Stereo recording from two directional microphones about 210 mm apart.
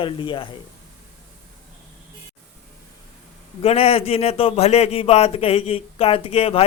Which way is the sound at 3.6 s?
30° left (ahead or behind).